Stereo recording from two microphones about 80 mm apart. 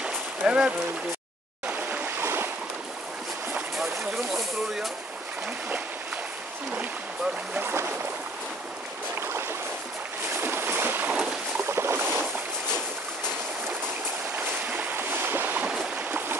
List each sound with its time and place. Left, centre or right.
0.0 s rowboat: centre
1.7 s stream: centre
3.5 s a sound: centre
7.6 s boat: right
9.2 s boat: right
14.7 s boat: right
16.1 s stream: right